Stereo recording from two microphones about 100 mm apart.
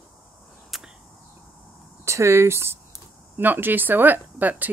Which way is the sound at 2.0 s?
25° right (ahead or behind).